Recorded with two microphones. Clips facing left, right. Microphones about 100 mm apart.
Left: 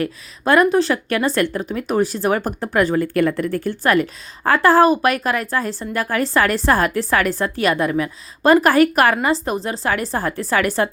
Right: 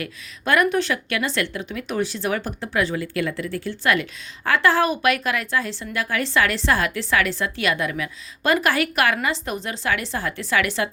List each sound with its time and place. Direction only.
0.0 s speech: 35° left (ahead or behind)